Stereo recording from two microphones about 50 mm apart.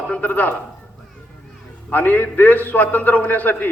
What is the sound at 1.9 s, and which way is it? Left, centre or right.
A man's voice, left.